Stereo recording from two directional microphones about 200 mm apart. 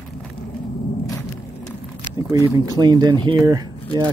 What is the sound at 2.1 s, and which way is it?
Speech, 15° right (ahead or behind).